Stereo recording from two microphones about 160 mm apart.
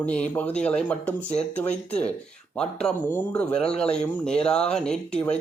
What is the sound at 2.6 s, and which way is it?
A man's voice, 5° left (ahead or behind).